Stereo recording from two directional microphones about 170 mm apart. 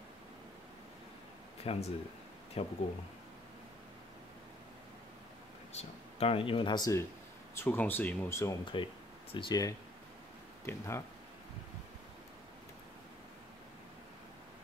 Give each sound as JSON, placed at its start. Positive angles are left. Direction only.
{"t": 1.6, "sound": "speech", "side_deg": 35}
{"t": 5.7, "sound": "speech", "side_deg": 35}
{"t": 9.3, "sound": "speech", "side_deg": 25}